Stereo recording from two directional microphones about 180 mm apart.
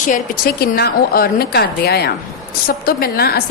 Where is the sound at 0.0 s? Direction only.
50° left (ahead or behind).